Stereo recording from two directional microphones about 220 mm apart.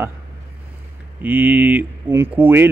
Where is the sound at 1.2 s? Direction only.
5° right (ahead or behind).